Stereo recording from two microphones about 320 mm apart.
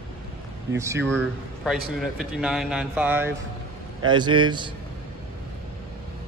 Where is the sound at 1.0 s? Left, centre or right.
Centre.